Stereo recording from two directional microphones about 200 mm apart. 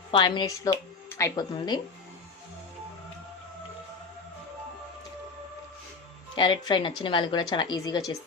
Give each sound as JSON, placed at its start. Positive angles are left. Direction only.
{"t": 0.1, "sound": "speech", "side_deg": 25}
{"t": 6.3, "sound": "a woman's voice", "side_deg": 25}